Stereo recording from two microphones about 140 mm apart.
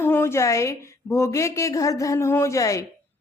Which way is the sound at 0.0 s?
15° left (ahead or behind).